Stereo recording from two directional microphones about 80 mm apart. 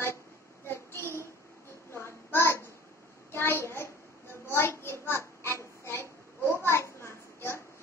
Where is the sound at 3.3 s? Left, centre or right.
Left.